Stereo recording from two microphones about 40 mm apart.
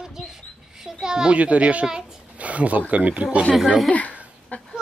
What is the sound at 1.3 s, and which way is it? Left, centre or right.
Speech, right.